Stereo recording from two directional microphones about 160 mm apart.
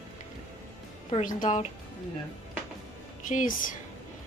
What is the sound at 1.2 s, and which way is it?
Speech, 55° left (ahead or behind).